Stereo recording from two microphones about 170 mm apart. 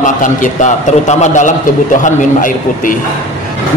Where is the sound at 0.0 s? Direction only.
50° left (ahead or behind).